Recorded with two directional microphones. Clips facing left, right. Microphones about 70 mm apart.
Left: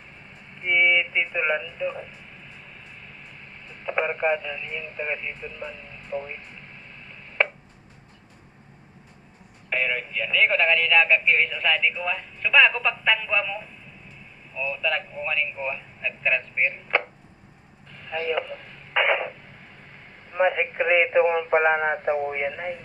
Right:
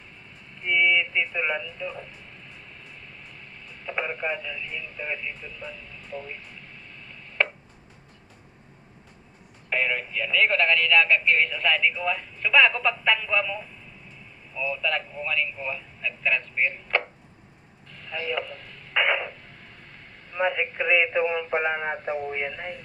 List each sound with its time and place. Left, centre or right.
0.6 s speech: left
3.8 s speech: left
9.6 s speech: centre
17.9 s radio: centre
20.5 s speech: left